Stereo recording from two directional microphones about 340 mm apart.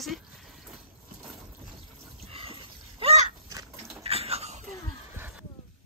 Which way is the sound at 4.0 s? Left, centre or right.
Centre.